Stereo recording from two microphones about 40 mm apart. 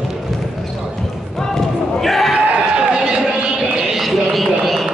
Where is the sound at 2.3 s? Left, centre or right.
Right.